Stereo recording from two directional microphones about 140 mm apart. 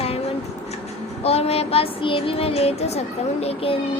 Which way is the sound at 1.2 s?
45° left (ahead or behind).